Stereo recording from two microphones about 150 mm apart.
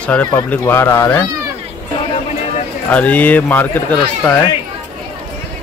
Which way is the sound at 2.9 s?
10° left (ahead or behind).